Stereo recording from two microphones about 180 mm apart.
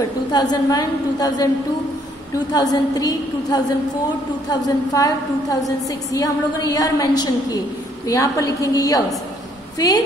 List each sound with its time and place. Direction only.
0.3 s a woman's voice: 20° left (ahead or behind)